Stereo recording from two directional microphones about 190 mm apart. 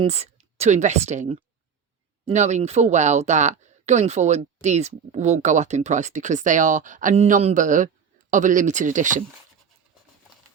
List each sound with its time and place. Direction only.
0.0 s a woman's voice: 35° right (ahead or behind)